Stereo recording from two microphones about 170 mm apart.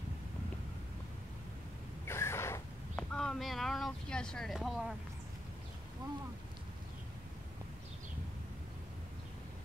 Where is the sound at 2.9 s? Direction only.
5° left (ahead or behind).